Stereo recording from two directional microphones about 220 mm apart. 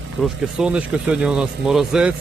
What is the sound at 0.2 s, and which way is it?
Speech, 5° right (ahead or behind).